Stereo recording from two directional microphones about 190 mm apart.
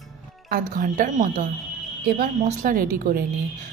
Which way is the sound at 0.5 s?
50° right (ahead or behind).